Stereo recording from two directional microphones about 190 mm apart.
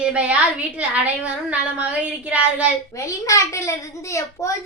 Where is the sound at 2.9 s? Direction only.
15° left (ahead or behind).